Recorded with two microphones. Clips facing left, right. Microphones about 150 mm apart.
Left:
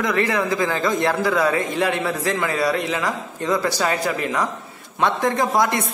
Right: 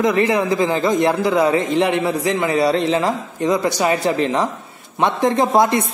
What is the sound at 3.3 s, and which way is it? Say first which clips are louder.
Speech: right 3 dB; 20° right (ahead or behind).